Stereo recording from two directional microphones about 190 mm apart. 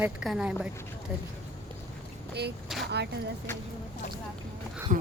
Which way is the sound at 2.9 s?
60° right (ahead or behind).